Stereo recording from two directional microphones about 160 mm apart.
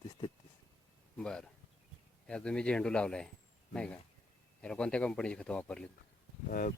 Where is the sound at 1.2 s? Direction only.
5° left (ahead or behind).